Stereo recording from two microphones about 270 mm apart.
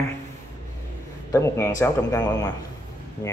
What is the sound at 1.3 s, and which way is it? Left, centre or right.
A man's voice, centre.